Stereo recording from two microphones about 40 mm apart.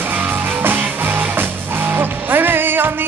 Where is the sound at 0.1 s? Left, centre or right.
Right.